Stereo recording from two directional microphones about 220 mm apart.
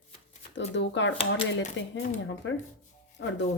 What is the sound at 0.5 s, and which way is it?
Speech, 55° left (ahead or behind).